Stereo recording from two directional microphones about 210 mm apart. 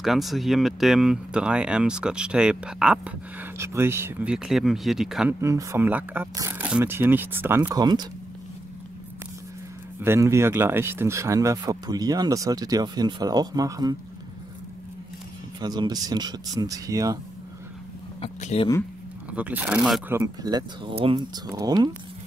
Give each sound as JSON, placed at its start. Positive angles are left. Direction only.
{"t": 0.0, "sound": "speech", "side_deg": 0}
{"t": 5.4, "sound": "speech", "side_deg": -15}
{"t": 9.9, "sound": "speech", "side_deg": -10}
{"t": 15.6, "sound": "speech", "side_deg": -20}
{"t": 18.2, "sound": "speech", "side_deg": 30}
{"t": 19.3, "sound": "speech", "side_deg": -5}